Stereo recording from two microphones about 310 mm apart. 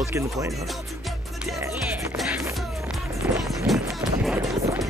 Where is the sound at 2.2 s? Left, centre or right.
Centre.